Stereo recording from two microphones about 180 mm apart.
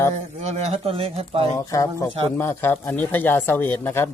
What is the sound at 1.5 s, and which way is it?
Speech, 20° left (ahead or behind).